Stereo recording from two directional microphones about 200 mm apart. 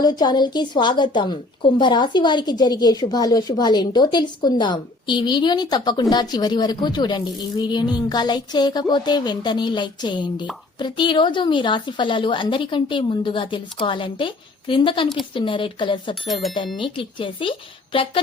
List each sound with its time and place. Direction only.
0.0 s a woman's voice: 20° left (ahead or behind)